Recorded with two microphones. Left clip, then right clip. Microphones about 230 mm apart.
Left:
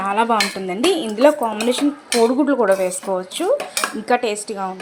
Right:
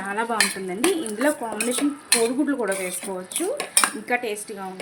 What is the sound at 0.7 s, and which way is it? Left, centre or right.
A woman's voice, centre.